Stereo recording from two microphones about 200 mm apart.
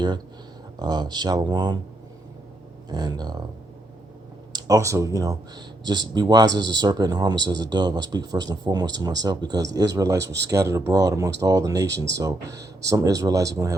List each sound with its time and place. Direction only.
0.8 s speech: 20° right (ahead or behind)
2.9 s speech: 20° right (ahead or behind)
4.5 s speech: 15° right (ahead or behind)